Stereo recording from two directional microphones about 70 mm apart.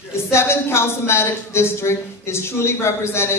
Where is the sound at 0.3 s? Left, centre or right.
Left.